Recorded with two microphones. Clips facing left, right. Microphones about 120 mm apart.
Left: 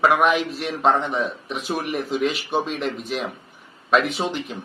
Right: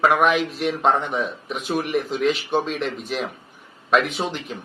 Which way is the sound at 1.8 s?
45° left (ahead or behind).